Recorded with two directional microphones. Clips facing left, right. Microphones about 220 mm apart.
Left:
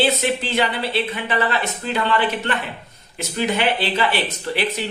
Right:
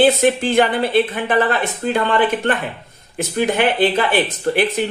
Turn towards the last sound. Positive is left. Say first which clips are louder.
# right 6 dB
turn(degrees=-50)  # may be behind; listen again after turning